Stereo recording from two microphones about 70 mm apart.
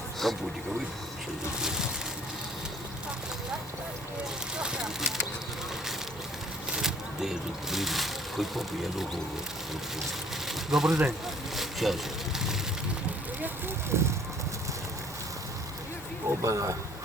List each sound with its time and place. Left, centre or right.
0.2 s speech: centre
4.6 s speech: centre
6.7 s speech: centre
10.5 s speech: centre
13.9 s speech: right
16.4 s speech: right